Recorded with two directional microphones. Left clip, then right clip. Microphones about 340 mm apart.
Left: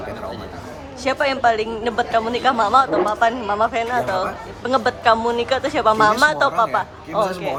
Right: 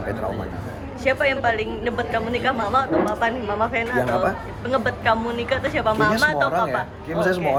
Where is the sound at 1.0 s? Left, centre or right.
Centre.